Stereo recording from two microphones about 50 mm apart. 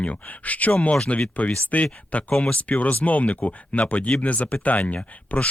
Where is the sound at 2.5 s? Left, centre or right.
Left.